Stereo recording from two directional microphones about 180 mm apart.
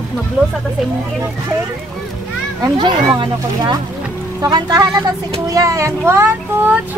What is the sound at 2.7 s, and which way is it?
A child's voice, 25° right (ahead or behind).